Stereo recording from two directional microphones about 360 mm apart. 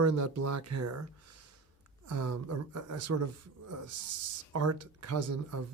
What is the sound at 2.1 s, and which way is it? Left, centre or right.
A man's voice, right.